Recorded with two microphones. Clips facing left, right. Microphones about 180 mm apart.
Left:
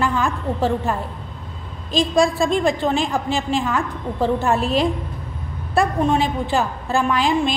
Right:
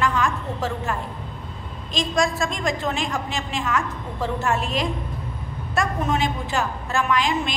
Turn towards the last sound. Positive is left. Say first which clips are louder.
# left 4 dB
turn(degrees=35)  # may be behind; listen again after turning